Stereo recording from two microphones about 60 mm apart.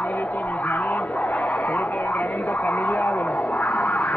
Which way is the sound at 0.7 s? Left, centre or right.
Left.